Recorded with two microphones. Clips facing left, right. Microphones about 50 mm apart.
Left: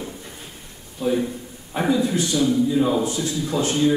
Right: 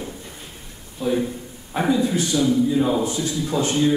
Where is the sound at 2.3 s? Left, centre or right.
Centre.